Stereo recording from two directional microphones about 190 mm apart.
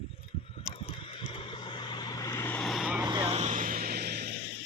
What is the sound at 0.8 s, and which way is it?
Vehicle, 30° left (ahead or behind).